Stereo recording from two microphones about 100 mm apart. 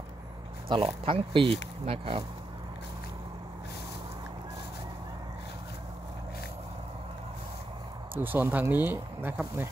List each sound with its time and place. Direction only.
0.8 s speech: 60° right (ahead or behind)
8.1 s speech: 20° right (ahead or behind)